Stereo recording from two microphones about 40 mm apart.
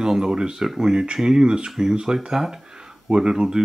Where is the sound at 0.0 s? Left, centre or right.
Centre.